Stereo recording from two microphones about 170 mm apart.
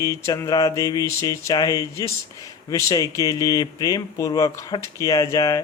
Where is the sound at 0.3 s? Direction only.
20° left (ahead or behind).